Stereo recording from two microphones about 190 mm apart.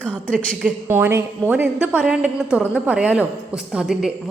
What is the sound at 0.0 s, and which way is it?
Speech, 5° left (ahead or behind).